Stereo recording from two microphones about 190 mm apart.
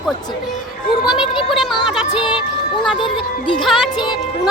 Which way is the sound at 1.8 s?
Centre (ahead or behind).